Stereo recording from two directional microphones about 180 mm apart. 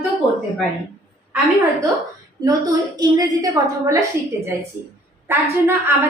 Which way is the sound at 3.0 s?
20° right (ahead or behind).